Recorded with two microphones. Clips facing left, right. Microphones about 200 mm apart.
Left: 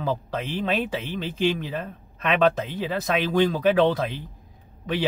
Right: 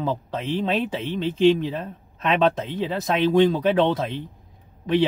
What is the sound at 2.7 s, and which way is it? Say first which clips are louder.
Speech: right 2 dB; centre (ahead or behind).